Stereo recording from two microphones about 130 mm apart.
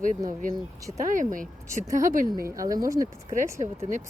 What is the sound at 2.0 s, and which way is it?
Speech, 85° right.